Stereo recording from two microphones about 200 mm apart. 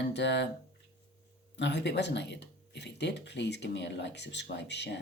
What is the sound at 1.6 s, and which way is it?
Speech, 60° left (ahead or behind).